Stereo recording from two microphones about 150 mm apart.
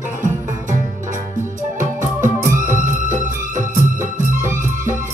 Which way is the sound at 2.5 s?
60° right (ahead or behind).